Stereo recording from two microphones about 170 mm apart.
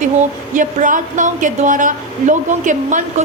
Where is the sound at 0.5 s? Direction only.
50° right (ahead or behind).